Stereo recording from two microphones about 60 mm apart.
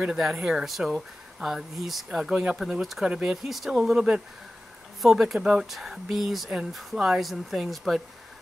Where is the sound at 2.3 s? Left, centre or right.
Centre.